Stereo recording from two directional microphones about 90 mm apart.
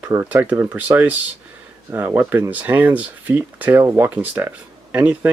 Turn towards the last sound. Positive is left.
turn(degrees=-20)  # may be behind; listen again after turning